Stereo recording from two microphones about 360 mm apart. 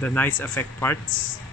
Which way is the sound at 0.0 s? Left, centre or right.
Centre.